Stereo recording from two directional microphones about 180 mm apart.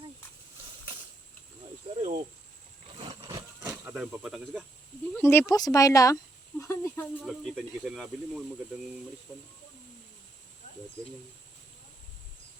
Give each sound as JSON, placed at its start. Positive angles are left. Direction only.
{"t": 2.0, "sound": "cricket", "side_deg": -40}
{"t": 3.0, "sound": "a sound", "side_deg": -35}
{"t": 3.7, "sound": "speech", "side_deg": -10}
{"t": 5.1, "sound": "speech", "side_deg": 15}
{"t": 6.6, "sound": "snake", "side_deg": 15}
{"t": 7.2, "sound": "speech", "side_deg": 0}